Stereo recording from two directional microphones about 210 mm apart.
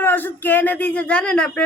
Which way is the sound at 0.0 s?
10° left (ahead or behind).